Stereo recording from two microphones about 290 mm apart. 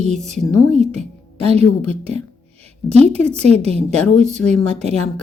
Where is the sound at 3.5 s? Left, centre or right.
Right.